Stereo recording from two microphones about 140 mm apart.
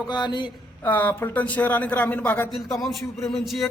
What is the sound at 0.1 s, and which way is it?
Mantra, 30° left (ahead or behind).